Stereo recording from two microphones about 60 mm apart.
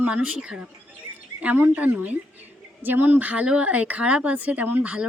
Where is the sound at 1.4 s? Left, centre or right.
Right.